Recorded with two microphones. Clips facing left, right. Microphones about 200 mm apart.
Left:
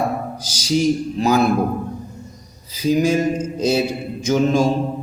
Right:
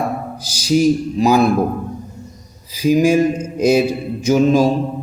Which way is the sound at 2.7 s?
10° right (ahead or behind).